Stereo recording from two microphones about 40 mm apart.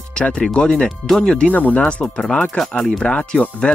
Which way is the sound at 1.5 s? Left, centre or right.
Left.